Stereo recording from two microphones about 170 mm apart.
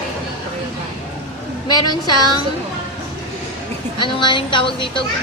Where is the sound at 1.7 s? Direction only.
25° left (ahead or behind).